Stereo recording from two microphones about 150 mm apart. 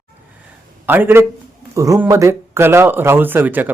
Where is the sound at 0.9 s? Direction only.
15° right (ahead or behind).